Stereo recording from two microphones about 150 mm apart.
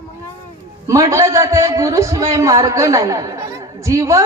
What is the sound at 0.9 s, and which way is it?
A man's voice, 20° right (ahead or behind).